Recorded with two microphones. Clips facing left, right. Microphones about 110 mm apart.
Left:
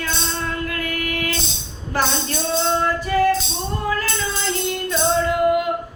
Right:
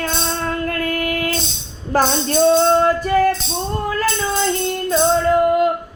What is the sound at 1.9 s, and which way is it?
Music, 45° right (ahead or behind).